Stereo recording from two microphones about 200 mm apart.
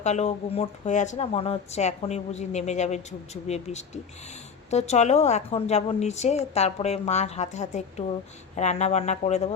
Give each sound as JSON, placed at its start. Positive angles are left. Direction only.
{"t": 0.0, "sound": "speech", "side_deg": 35}